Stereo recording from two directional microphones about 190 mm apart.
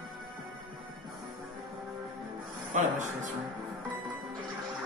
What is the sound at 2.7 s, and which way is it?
Speech, 40° right (ahead or behind).